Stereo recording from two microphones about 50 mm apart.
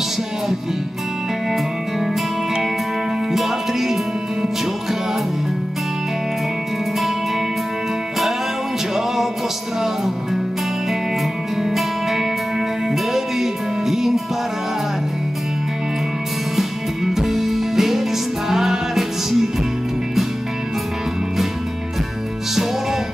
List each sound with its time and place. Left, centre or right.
3.3 s music: centre
8.9 s music: centre
11.7 s music: centre
16.5 s music: centre